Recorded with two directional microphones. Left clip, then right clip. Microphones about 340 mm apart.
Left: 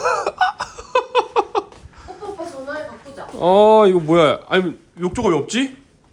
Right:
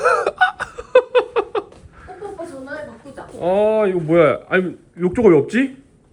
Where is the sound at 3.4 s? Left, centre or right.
Centre.